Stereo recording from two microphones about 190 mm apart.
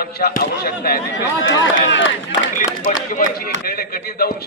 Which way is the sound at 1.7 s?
80° left.